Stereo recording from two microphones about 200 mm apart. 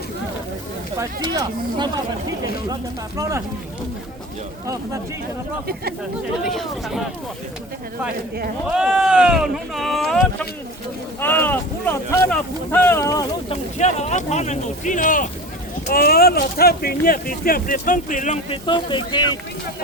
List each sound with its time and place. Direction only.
0.9 s speech: 20° right (ahead or behind)
3.2 s speech: 15° right (ahead or behind)
6.4 s speech: centre (ahead or behind)
8.7 s speech: 5° right (ahead or behind); by 13.2 s 15° left (ahead or behind)
13.7 s speech: 35° left (ahead or behind)